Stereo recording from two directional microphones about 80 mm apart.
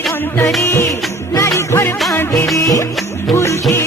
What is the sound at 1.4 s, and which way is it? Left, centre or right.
Music, left.